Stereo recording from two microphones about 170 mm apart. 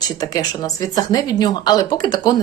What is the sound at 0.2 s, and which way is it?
Speech, 20° left (ahead or behind).